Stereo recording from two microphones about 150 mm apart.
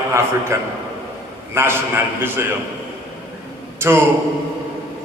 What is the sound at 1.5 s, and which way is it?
Speech, 15° right (ahead or behind).